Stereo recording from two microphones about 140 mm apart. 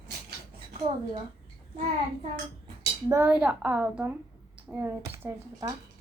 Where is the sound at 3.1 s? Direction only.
15° right (ahead or behind).